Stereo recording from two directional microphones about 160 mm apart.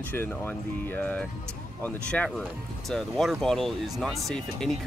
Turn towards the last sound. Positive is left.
turn(degrees=0)  # may be behind; listen again after turning